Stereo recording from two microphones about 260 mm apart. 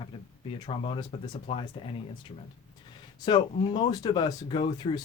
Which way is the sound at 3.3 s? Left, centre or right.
Centre.